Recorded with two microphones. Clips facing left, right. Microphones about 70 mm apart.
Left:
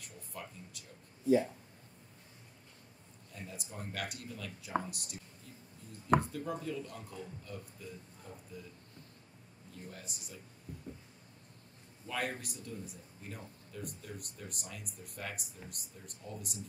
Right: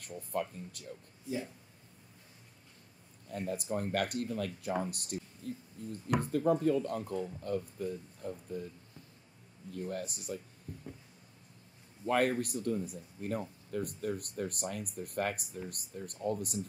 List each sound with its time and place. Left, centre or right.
0.0 s speech: right
3.3 s speech: right
4.9 s a sound: right
6.3 s speech: right
9.7 s speech: right
12.1 s speech: right